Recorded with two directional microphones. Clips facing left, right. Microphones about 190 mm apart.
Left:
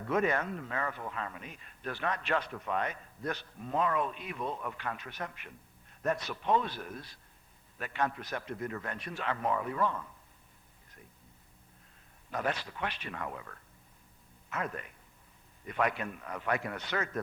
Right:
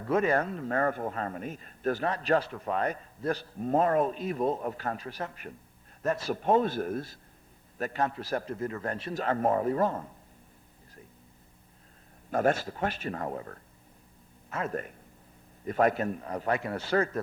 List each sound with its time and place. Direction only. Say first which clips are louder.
0.0 s a man's voice: right 4 dB; 30° right (ahead or behind)
0.7 s a man's voice: right 8 dB; 45° right (ahead or behind); by 6.3 s 30° right (ahead or behind)
6.3 s a man's voice: right 6 dB; 45° right (ahead or behind)
12.3 s a man's voice: right 8 dB; 45° right (ahead or behind); by 14.8 s 30° right (ahead or behind)
15.6 s a man's voice: right 7 dB; 40° right (ahead or behind)